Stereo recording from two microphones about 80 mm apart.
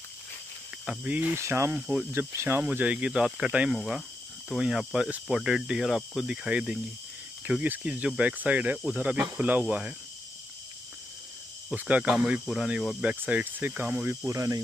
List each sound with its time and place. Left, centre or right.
0.8 s speech: centre
1.3 s speech: right
1.7 s speech: centre
2.1 s speech: right
2.7 s speech: centre
3.7 s speech: centre
11.7 s speech: centre
13.0 s speech: centre
14.0 s speech: right